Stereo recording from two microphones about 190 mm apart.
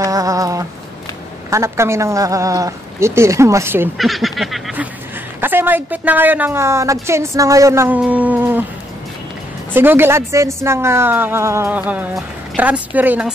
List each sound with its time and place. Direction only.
0.0 s a sound: 20° right (ahead or behind)
1.5 s a woman's voice: 15° right (ahead or behind)
4.0 s goose: centre (ahead or behind)
5.4 s a woman's voice: 10° right (ahead or behind)
9.8 s a woman's voice: 10° right (ahead or behind)